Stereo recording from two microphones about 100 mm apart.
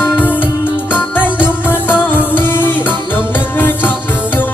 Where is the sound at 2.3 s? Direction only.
20° left (ahead or behind).